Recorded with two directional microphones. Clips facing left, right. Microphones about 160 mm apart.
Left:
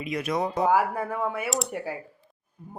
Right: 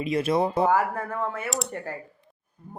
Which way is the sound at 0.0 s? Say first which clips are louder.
Right 4 dB; 30° right (ahead or behind).